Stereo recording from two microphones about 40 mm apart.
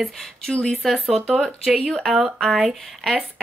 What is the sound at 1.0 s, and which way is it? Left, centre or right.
Speech, right.